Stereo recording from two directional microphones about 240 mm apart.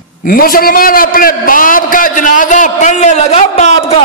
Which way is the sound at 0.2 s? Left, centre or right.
Left.